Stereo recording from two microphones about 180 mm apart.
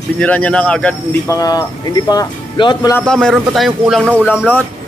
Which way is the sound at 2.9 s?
5° left (ahead or behind).